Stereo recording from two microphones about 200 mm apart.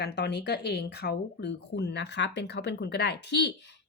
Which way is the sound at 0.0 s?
55° left (ahead or behind).